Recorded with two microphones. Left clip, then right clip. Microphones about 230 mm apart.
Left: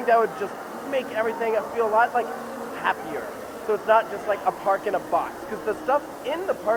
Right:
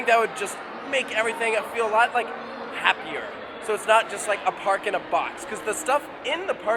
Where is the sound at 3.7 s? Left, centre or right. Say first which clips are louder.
Even; centre.